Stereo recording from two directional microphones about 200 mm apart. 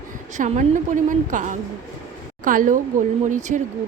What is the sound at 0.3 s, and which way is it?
A woman's voice, 35° right (ahead or behind).